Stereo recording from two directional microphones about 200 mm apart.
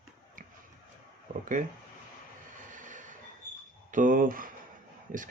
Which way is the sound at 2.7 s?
40° right (ahead or behind).